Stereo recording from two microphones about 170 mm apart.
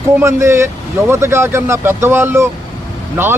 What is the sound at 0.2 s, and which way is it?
Speech, 15° right (ahead or behind).